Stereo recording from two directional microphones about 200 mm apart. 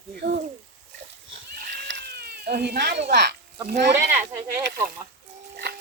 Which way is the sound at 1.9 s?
55° right (ahead or behind).